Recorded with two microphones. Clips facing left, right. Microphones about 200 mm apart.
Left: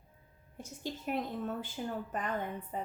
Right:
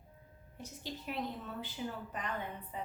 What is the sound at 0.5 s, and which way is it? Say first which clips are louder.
A woman's voice: left 4 dB; 50° left (ahead or behind).